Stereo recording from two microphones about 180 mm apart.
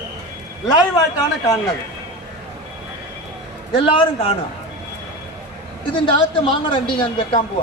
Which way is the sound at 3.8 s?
30° left (ahead or behind).